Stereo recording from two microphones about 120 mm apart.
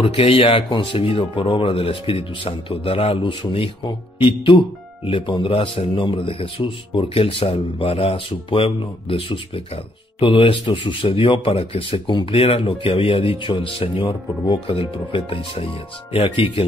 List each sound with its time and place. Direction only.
0.0 s speech: 55° left (ahead or behind)
12.1 s speech: 40° left (ahead or behind)
12.4 s speech: 55° left (ahead or behind)